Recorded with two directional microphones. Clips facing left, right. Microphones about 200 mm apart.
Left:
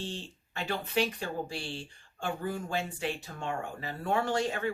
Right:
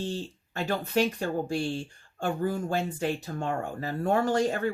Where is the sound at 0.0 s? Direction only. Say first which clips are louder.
Right 6 dB; 40° right (ahead or behind).